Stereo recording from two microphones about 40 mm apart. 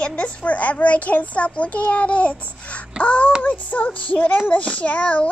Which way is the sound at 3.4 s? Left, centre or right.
Left.